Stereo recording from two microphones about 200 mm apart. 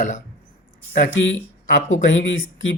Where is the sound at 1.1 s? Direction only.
65° left (ahead or behind).